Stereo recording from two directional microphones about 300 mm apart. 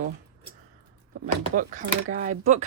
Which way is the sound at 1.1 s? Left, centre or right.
Right.